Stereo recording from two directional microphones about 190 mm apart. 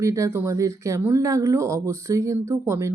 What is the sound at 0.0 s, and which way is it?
Speech, 15° right (ahead or behind).